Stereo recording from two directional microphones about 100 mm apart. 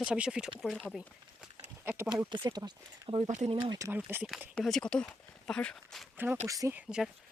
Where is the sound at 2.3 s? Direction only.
45° right (ahead or behind).